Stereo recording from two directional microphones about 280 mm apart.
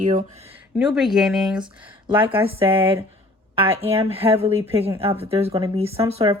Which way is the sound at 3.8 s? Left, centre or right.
Right.